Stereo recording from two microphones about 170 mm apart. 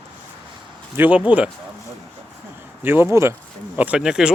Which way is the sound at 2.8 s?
15° right (ahead or behind).